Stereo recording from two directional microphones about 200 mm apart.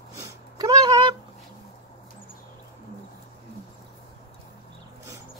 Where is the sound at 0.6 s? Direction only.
20° right (ahead or behind).